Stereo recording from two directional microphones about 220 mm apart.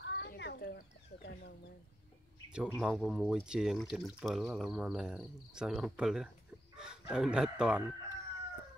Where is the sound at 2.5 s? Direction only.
5° right (ahead or behind).